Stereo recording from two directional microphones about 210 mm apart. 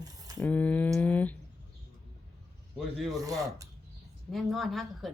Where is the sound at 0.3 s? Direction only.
10° left (ahead or behind).